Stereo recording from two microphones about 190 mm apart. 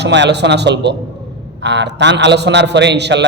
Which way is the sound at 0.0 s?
65° right (ahead or behind).